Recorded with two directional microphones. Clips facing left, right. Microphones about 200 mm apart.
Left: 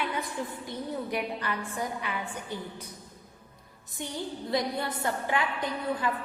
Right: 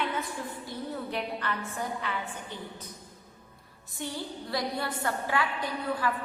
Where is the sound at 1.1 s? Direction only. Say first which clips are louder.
Left 1 dB; 10° left (ahead or behind).